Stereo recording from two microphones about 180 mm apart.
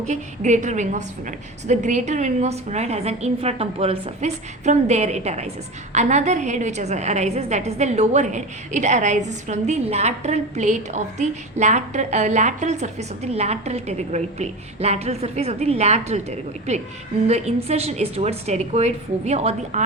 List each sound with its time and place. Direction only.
0.1 s a woman's voice: 45° right (ahead or behind)
17.2 s a woman's voice: 35° right (ahead or behind)